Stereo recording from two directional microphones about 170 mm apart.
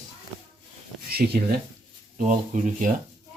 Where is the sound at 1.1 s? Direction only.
65° right (ahead or behind).